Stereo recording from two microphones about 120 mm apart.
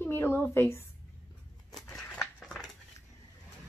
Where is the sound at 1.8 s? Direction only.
5° left (ahead or behind).